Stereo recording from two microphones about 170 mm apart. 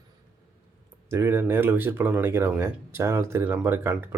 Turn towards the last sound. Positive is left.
turn(degrees=-15)  # may be behind; listen again after turning